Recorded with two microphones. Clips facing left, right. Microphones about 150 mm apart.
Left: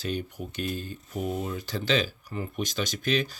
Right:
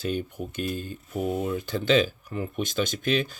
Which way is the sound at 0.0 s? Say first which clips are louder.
Right 3 dB; 50° right (ahead or behind).